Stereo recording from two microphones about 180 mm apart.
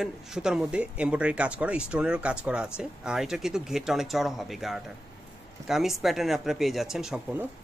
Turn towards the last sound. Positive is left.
turn(degrees=-5)  # may be behind; listen again after turning